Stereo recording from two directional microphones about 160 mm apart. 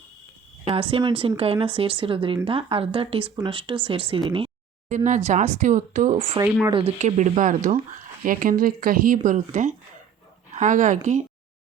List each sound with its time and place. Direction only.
0.6 s speech: 35° right (ahead or behind)
4.9 s speech: 50° right (ahead or behind)
6.7 s speech: 35° right (ahead or behind)
7.0 s speech: 45° right (ahead or behind)